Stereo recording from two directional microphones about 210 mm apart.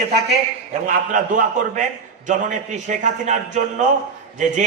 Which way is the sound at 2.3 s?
35° right (ahead or behind).